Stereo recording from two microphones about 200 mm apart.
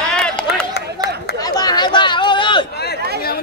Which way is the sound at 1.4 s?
20° left (ahead or behind).